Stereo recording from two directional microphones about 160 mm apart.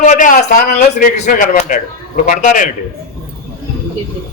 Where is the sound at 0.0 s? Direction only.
50° left (ahead or behind).